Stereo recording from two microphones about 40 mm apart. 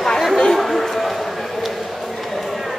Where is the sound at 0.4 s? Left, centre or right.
Centre.